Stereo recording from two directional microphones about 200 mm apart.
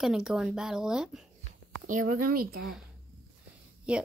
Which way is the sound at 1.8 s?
40° right (ahead or behind).